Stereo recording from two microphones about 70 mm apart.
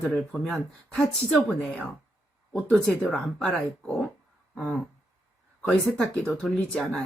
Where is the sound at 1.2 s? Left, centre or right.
Centre.